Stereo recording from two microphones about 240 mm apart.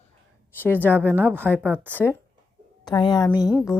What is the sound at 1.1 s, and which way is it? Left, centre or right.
Speech, centre.